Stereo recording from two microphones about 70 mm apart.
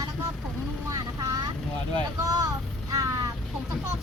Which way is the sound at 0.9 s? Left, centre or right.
Right.